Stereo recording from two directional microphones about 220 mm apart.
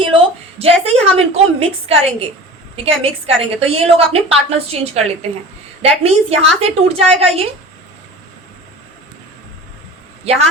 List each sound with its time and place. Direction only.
0.0 s a woman's voice: 25° right (ahead or behind)
10.3 s a woman's voice: 30° right (ahead or behind)